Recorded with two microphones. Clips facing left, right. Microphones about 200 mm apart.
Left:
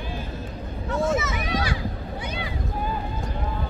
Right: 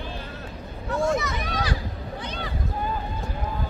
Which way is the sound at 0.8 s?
Centre (ahead or behind).